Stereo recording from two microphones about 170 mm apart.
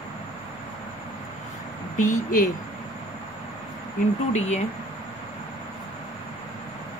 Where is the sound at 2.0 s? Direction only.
50° left (ahead or behind).